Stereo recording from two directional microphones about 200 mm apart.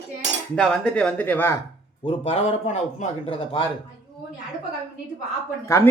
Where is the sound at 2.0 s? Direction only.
30° left (ahead or behind).